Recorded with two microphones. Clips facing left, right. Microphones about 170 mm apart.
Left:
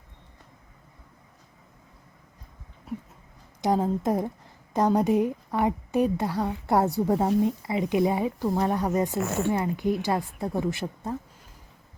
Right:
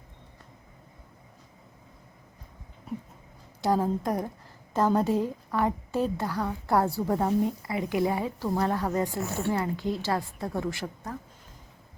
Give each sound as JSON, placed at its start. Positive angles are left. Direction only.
{"t": 3.6, "sound": "a woman's voice", "side_deg": 20}